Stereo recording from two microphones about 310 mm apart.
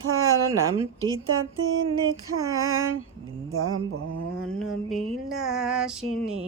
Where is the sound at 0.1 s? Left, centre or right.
Right.